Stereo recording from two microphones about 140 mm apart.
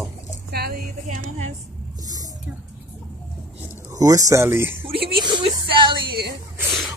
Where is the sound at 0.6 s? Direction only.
90° right; by 1.5 s 60° right (ahead or behind).